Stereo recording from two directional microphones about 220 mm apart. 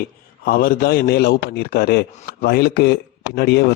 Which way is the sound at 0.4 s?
40° left (ahead or behind).